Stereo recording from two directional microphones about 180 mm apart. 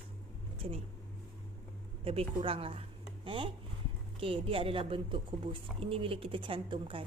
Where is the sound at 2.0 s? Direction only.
35° right (ahead or behind).